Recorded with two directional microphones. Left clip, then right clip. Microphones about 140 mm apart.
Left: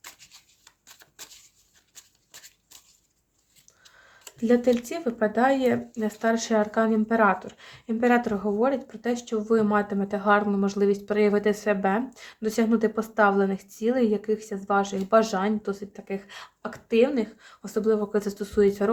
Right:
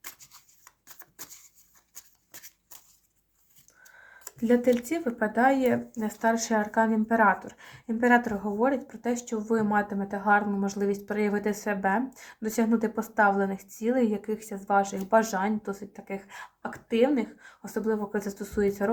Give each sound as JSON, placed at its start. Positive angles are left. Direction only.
{"t": 3.8, "sound": "speech", "side_deg": 20}
{"t": 9.6, "sound": "speech", "side_deg": 45}